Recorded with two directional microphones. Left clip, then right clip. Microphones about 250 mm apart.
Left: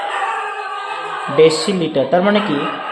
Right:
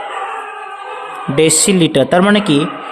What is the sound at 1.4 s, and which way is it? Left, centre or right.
Speech, right.